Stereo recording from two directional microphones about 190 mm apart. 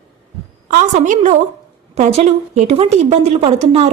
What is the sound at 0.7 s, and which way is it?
A woman's voice, 40° right (ahead or behind).